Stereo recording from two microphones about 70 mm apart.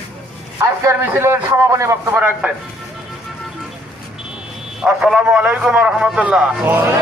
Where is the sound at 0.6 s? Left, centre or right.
Right.